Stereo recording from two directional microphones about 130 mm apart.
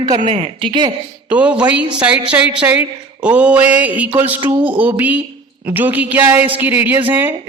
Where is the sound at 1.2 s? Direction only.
10° right (ahead or behind).